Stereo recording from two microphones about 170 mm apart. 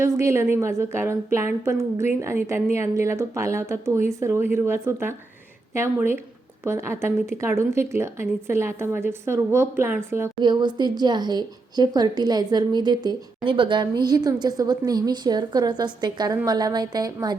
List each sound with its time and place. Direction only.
0.0 s a woman's voice: 15° right (ahead or behind)